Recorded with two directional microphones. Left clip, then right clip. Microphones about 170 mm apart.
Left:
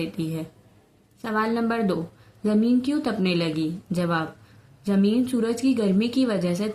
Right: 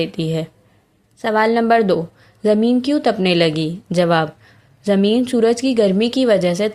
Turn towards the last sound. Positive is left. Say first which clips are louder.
# right 10 dB
turn(degrees=-35)  # may be behind; listen again after turning